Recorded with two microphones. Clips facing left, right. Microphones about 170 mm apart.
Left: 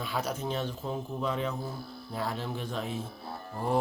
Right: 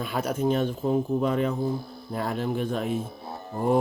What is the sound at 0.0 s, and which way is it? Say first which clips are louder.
A man's voice: right 7 dB; 55° right (ahead or behind).